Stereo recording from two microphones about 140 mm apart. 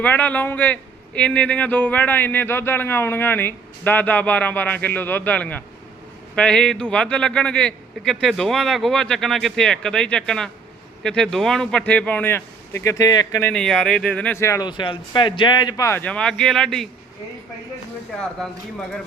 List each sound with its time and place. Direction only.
0.0 s a man's voice: 10° left (ahead or behind)
13.4 s a man's voice: 5° left (ahead or behind)
14.6 s speech: 35° left (ahead or behind)
15.9 s a man's voice: 10° left (ahead or behind)